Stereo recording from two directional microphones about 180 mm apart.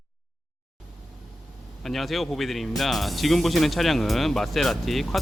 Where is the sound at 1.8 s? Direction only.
Centre (ahead or behind).